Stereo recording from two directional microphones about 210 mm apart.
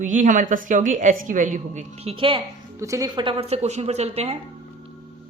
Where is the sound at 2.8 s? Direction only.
15° right (ahead or behind); by 4.4 s 30° right (ahead or behind).